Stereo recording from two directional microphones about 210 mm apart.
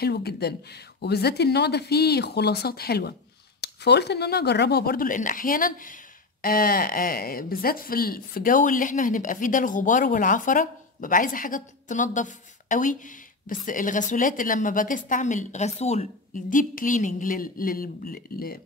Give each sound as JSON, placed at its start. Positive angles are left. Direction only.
{"t": 0.0, "sound": "a woman's voice", "side_deg": 50}